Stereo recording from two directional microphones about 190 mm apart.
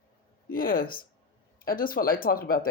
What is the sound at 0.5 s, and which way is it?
Speech, 50° left (ahead or behind).